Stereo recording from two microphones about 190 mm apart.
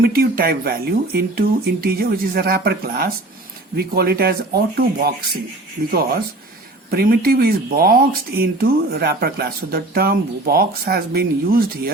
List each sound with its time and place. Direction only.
0.0 s speech: 50° right (ahead or behind)